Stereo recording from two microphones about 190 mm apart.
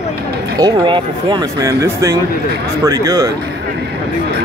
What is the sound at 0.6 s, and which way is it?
Speech, 20° right (ahead or behind).